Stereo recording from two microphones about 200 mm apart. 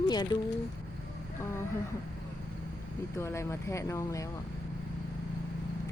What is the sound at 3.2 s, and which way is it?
Speech, 15° left (ahead or behind).